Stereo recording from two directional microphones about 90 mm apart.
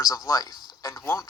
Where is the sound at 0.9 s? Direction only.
30° left (ahead or behind).